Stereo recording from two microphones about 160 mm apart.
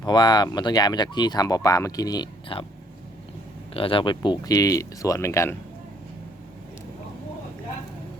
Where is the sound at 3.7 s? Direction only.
35° left (ahead or behind); by 5.5 s 15° left (ahead or behind).